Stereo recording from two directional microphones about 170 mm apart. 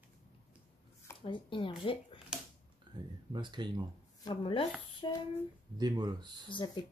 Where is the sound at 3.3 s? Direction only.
25° right (ahead or behind).